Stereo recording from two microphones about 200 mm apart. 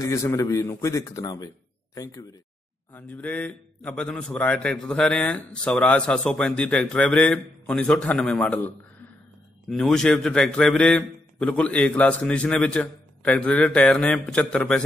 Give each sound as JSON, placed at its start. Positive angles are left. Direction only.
{"t": 0.0, "sound": "a man's voice", "side_deg": 15}
{"t": 2.9, "sound": "a man's voice", "side_deg": 10}